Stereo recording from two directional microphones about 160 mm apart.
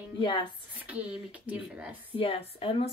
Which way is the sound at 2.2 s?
35° left (ahead or behind).